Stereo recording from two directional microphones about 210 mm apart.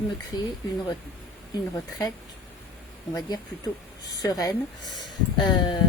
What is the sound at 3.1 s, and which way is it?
A woman's voice, 15° left (ahead or behind).